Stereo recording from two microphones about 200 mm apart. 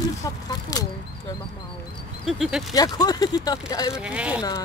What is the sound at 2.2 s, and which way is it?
Speech, centre (ahead or behind).